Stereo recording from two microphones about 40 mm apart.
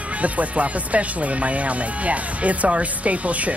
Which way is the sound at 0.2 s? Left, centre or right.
Right.